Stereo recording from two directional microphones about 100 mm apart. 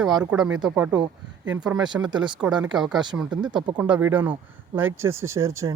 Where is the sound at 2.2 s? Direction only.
10° right (ahead or behind).